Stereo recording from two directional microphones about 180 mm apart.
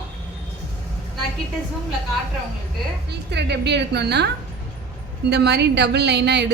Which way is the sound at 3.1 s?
70° right (ahead or behind).